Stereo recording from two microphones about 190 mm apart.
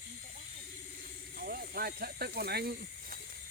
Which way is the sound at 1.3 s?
50° right (ahead or behind).